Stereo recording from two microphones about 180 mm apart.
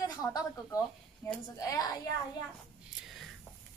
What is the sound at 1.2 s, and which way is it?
Speech, 15° left (ahead or behind).